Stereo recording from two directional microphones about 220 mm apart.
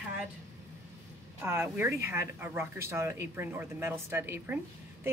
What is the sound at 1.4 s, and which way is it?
Speech, 10° right (ahead or behind).